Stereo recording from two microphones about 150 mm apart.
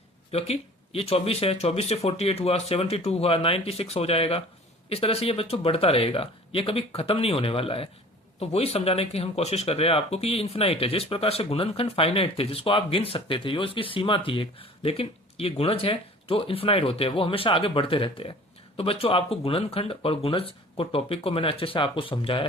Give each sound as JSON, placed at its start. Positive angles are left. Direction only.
{"t": 0.3, "sound": "speech", "side_deg": 40}